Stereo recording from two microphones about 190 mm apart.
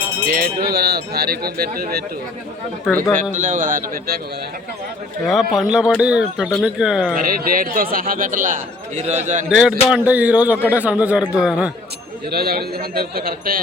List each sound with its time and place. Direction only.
0.3 s speech: 50° right (ahead or behind)
3.3 s a man's voice: 40° right (ahead or behind)
5.2 s speech: centre (ahead or behind)
7.2 s a man's voice: 50° right (ahead or behind)
9.5 s speech: 5° right (ahead or behind)
12.3 s a man's voice: 55° right (ahead or behind)